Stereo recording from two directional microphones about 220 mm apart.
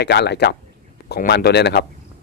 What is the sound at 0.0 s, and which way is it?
A man's voice, 50° left (ahead or behind).